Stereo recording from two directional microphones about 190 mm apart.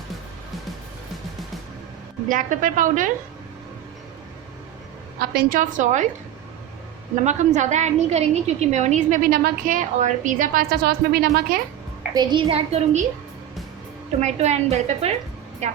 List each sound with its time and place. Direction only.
2.2 s a woman's voice: 45° right (ahead or behind)
5.2 s a woman's voice: 55° right (ahead or behind)
7.3 s a woman's voice: 40° right (ahead or behind); by 11.4 s 55° right (ahead or behind)
12.1 s a woman's voice: 25° right (ahead or behind)
14.2 s a woman's voice: 35° right (ahead or behind)